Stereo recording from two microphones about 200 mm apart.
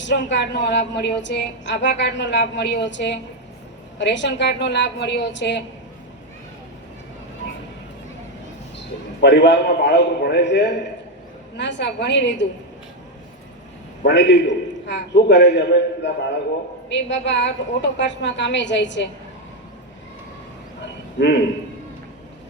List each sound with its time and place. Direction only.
0.0 s a woman's voice: 60° left (ahead or behind)
8.8 s a woman's voice: 60° left (ahead or behind)
14.0 s a woman's voice: 60° left (ahead or behind)
21.2 s a woman's voice: 60° left (ahead or behind)